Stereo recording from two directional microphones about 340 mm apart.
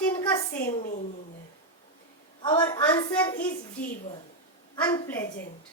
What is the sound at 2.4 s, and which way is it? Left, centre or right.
Speech, centre.